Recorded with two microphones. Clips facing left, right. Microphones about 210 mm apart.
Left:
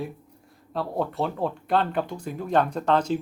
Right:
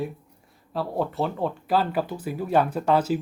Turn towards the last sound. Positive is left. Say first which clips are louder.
# right 1 dB
turn(degrees=-5)  # may be behind; listen again after turning